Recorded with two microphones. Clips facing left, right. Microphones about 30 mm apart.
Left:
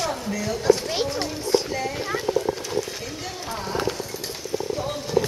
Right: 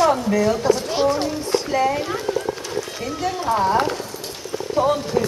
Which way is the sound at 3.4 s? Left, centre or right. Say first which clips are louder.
Right 9 dB; right.